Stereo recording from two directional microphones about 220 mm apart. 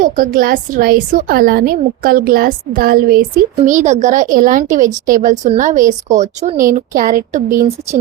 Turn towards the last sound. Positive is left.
turn(degrees=-35)  # may be behind; listen again after turning